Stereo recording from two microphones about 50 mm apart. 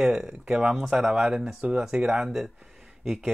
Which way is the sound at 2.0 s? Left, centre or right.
Centre.